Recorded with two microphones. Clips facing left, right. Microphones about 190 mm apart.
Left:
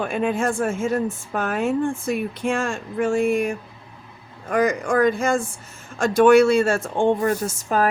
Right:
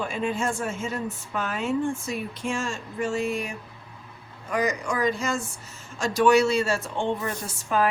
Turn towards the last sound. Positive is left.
turn(degrees=45)  # may be behind; listen again after turning